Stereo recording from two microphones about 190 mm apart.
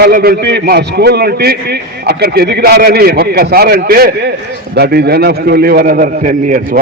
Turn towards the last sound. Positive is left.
turn(degrees=-45)  # may be behind; listen again after turning